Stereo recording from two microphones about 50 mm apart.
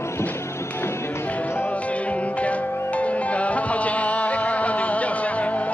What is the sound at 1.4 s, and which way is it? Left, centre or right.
Music, left.